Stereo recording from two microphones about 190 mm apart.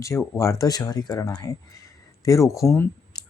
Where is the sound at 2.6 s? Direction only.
15° left (ahead or behind).